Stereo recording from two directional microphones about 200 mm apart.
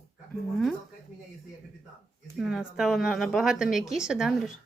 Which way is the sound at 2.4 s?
Centre (ahead or behind).